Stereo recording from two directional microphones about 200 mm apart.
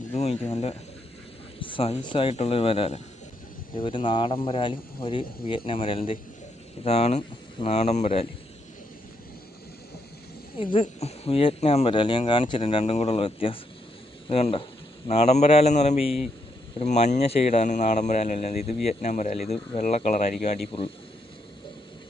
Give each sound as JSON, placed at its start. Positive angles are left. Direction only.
{"t": 0.1, "sound": "speech", "side_deg": 35}
{"t": 10.6, "sound": "a man's voice", "side_deg": 30}